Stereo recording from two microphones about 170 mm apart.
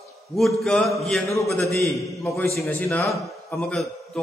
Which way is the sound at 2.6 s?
10° left (ahead or behind).